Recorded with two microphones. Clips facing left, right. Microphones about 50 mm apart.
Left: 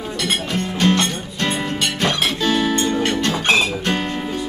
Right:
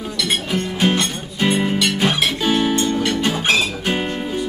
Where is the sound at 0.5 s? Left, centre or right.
Centre.